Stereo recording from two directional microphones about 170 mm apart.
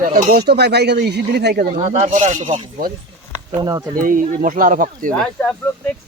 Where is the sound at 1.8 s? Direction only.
45° right (ahead or behind).